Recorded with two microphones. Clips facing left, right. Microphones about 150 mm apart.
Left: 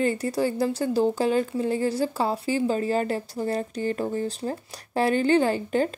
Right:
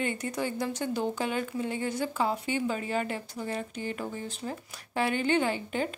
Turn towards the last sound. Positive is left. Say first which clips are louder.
# left 6 dB
turn(degrees=40)  # may be behind; listen again after turning